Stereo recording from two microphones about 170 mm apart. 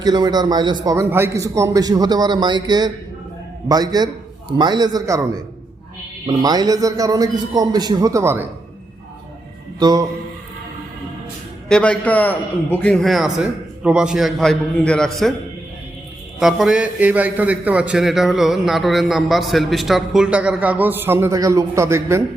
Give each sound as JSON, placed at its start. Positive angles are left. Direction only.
{"t": 0.0, "sound": "a man's voice", "side_deg": -25}
{"t": 9.7, "sound": "a man's voice", "side_deg": -25}
{"t": 11.7, "sound": "a man's voice", "side_deg": 5}
{"t": 16.4, "sound": "a man's voice", "side_deg": 0}